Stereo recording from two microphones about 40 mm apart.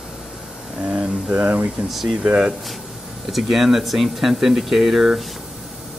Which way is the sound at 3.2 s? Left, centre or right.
Centre.